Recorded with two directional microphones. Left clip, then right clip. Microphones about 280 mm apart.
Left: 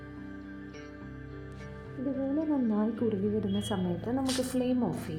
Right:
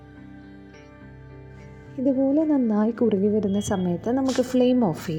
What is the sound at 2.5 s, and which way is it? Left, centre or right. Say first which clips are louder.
Speech: right 8 dB; right.